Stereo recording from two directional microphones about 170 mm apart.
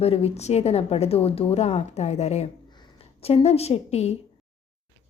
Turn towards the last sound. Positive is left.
turn(degrees=40)  # may be behind; listen again after turning